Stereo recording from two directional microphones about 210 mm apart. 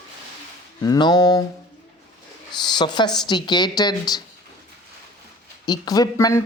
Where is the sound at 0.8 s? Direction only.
20° left (ahead or behind).